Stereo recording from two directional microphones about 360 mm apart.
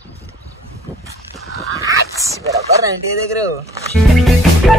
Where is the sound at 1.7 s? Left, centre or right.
Centre.